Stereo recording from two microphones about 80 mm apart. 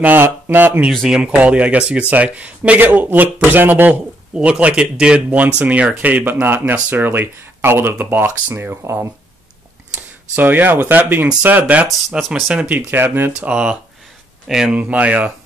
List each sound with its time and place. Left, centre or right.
0.0 s speech: right
1.0 s speech: centre; by 9.1 s right
10.3 s speech: right
12.9 s speech: right
13.4 s speech: centre
14.8 s speech: centre